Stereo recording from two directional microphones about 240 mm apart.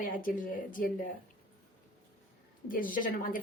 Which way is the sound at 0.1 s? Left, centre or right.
Left.